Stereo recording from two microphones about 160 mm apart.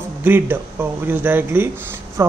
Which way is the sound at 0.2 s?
15° right (ahead or behind).